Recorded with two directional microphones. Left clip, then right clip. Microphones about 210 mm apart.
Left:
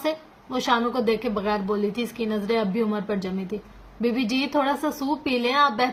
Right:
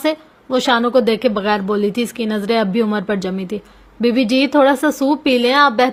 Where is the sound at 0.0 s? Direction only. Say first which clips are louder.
Right 8 dB; 45° right (ahead or behind).